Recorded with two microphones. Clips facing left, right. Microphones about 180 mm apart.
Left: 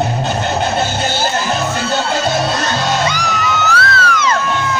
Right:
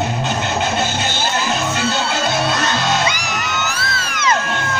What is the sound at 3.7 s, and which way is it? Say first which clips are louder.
Music: left 9 dB; 70° left (ahead or behind).